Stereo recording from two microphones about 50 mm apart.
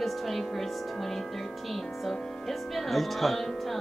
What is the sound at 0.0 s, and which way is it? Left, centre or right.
Music, centre.